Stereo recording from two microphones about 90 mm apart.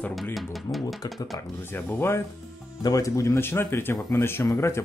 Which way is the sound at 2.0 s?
30° left (ahead or behind).